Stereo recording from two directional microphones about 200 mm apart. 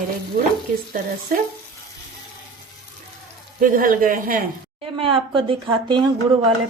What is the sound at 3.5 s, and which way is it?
Speech, 45° right (ahead or behind).